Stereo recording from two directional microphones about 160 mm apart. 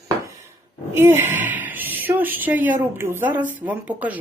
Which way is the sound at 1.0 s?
15° right (ahead or behind).